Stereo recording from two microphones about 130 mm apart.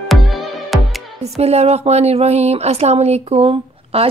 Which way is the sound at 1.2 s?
55° right (ahead or behind).